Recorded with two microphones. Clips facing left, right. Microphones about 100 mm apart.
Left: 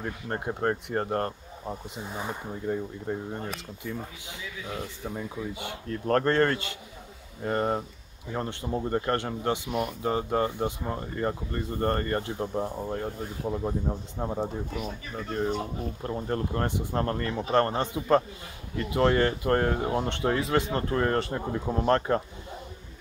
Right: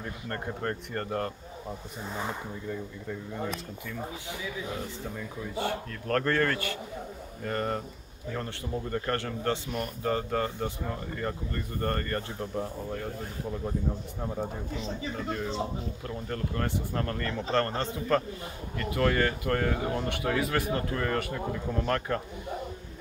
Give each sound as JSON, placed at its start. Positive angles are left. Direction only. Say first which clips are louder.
{"t": 0.0, "sound": "speech", "louder": "left 3 dB", "side_deg": 45}
{"t": 2.0, "sound": "speech", "louder": "right 2 dB", "side_deg": 15}
{"t": 2.7, "sound": "speech", "louder": "left 7 dB", "side_deg": 45}
{"t": 5.0, "sound": "speech", "louder": "left 3 dB", "side_deg": 20}
{"t": 14.8, "sound": "speech", "louder": "right 1 dB", "side_deg": -25}
{"t": 16.0, "sound": "speech", "louder": "left 7 dB", "side_deg": 30}